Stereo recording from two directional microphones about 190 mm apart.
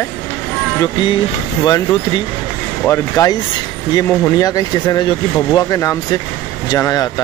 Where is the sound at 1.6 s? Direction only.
20° left (ahead or behind).